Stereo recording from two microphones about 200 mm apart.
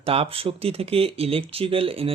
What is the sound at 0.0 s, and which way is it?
Speech, 30° right (ahead or behind).